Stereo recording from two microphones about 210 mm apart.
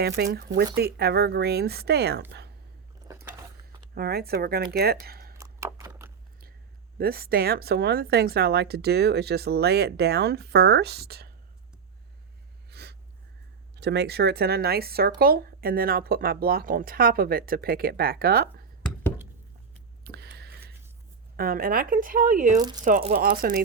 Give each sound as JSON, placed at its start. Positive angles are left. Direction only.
{"t": 0.3, "sound": "speech", "side_deg": -50}
{"t": 3.9, "sound": "speech", "side_deg": -45}
{"t": 5.4, "sound": "a sound", "side_deg": -15}
{"t": 7.0, "sound": "speech", "side_deg": -45}
{"t": 12.7, "sound": "a sound", "side_deg": -50}
{"t": 13.7, "sound": "speech", "side_deg": -55}
{"t": 20.1, "sound": "a sound", "side_deg": -50}
{"t": 21.3, "sound": "speech", "side_deg": -45}
{"t": 22.5, "sound": "speech", "side_deg": -20}
{"t": 22.8, "sound": "speech", "side_deg": -40}